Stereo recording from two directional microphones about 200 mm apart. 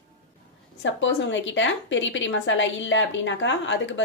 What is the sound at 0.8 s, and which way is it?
A woman's voice, 70° left (ahead or behind).